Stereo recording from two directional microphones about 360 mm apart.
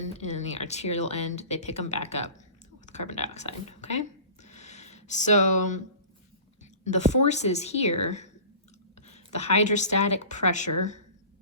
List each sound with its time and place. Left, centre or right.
0.0 s speech: centre
4.4 s a sound: centre
6.8 s speech: centre